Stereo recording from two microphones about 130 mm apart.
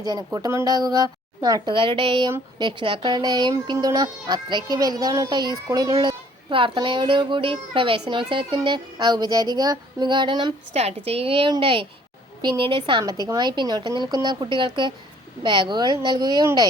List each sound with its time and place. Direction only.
0.0 s speech: 30° right (ahead or behind)
10.8 s a woman's voice: 55° right (ahead or behind); by 16.5 s 35° right (ahead or behind)